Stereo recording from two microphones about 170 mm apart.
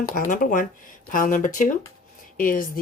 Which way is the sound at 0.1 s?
50° left (ahead or behind).